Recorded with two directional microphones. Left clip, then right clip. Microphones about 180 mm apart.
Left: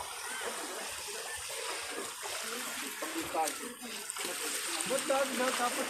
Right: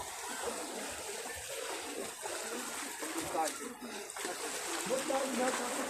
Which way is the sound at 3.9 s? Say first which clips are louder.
Left 2 dB; 50° right (ahead or behind).